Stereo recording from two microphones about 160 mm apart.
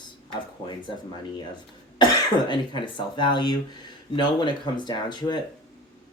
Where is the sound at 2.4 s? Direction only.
30° left (ahead or behind).